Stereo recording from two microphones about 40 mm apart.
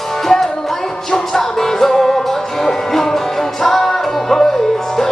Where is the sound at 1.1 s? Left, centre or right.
Centre.